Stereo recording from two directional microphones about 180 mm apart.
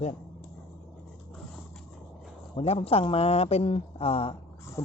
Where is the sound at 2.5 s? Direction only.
30° left (ahead or behind).